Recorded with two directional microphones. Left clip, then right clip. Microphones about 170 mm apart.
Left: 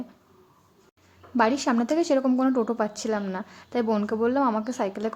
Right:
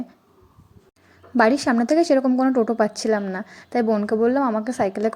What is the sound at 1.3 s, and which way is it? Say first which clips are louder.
A woman's voice: right 5 dB; 20° right (ahead or behind).